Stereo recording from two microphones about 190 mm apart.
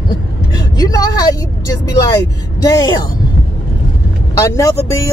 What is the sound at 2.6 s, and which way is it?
Speech, 20° left (ahead or behind).